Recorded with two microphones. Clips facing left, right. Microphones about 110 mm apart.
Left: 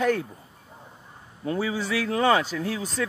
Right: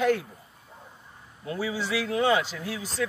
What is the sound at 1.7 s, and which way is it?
Speech, 45° left (ahead or behind).